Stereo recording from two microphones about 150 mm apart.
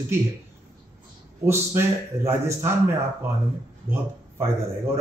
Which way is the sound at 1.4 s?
15° right (ahead or behind).